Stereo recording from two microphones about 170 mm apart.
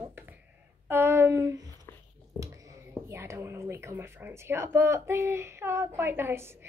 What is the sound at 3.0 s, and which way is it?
A woman's voice, 15° right (ahead or behind).